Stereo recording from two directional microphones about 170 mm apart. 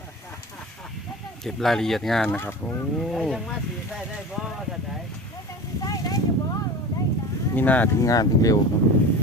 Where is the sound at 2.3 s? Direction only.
15° left (ahead or behind).